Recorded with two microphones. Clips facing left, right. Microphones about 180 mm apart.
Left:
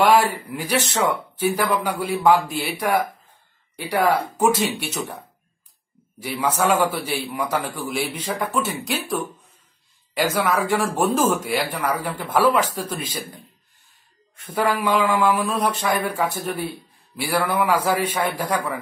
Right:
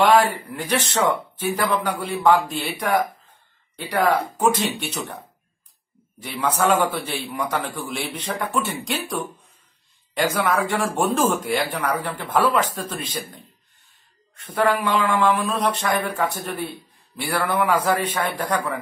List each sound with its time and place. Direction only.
0.0 s a man's voice: 10° left (ahead or behind)
6.2 s speech: 10° left (ahead or behind)